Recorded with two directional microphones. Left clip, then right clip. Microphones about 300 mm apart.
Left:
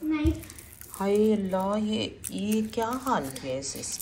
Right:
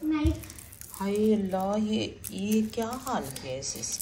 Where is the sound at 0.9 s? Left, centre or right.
Centre.